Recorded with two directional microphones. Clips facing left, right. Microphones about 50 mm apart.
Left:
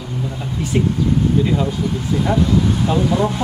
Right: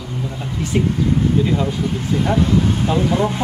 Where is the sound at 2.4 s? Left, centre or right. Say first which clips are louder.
Even; right.